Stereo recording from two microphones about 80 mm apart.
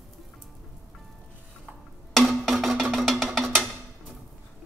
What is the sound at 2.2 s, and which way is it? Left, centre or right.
Music, centre.